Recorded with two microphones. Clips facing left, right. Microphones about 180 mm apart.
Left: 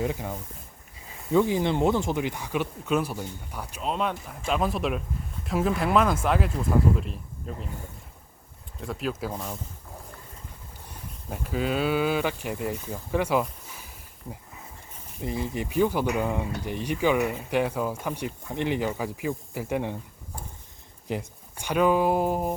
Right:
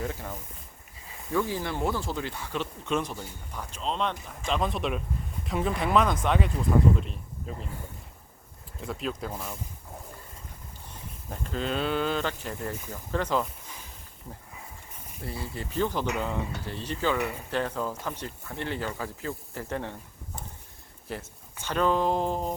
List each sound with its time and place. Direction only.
0.0 s speech: 15° left (ahead or behind); by 7.7 s centre (ahead or behind)
8.8 s speech: centre (ahead or behind)
10.8 s speech: 10° left (ahead or behind)
15.2 s speech: 20° left (ahead or behind)